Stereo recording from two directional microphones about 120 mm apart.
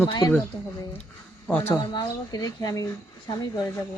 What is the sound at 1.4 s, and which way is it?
Speech, 10° left (ahead or behind).